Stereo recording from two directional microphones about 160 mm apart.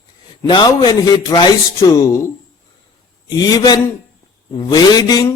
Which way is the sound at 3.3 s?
25° left (ahead or behind).